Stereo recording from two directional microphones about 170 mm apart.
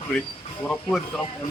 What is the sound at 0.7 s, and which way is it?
Speech, 5° left (ahead or behind).